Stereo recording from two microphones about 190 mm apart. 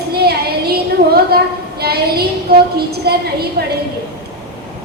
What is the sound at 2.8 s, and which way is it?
Speech, 55° right (ahead or behind).